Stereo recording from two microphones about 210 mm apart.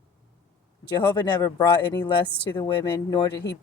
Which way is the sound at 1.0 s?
20° left (ahead or behind).